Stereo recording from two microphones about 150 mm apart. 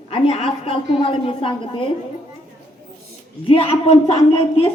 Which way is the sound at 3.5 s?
40° left (ahead or behind).